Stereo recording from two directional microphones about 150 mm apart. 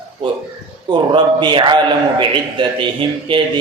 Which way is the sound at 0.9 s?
30° right (ahead or behind).